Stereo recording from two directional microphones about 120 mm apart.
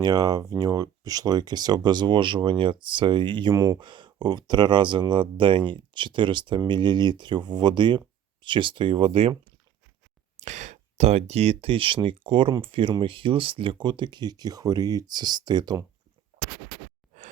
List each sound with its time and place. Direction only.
0.0 s speech: 35° right (ahead or behind)
3.5 s speech: 30° right (ahead or behind); by 9.3 s 50° right (ahead or behind)
10.4 s speech: 85° right; by 15.8 s 35° right (ahead or behind)